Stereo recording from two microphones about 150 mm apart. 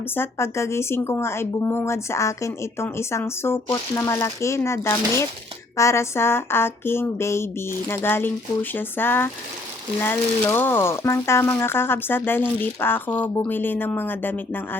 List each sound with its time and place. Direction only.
0.1 s speech: 15° left (ahead or behind)